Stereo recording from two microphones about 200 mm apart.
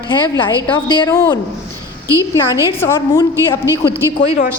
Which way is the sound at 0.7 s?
20° left (ahead or behind).